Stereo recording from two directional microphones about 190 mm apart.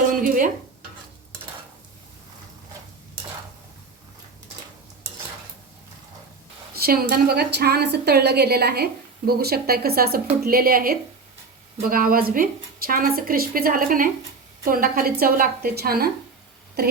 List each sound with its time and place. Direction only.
0.1 s stir: 45° right (ahead or behind)
6.7 s a woman's voice: 55° right (ahead or behind)